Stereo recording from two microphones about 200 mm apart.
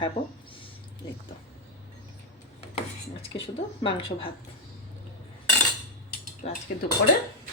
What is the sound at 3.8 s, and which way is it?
Speech, 25° left (ahead or behind).